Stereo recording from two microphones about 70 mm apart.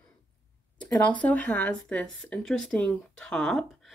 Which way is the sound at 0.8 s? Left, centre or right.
Left.